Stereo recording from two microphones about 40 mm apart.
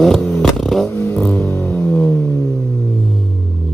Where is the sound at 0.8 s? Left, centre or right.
Left.